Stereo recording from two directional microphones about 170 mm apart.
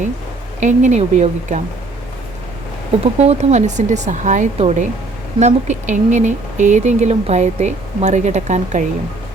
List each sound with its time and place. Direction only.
0.6 s speech: 45° right (ahead or behind)
3.0 s speech: 40° right (ahead or behind)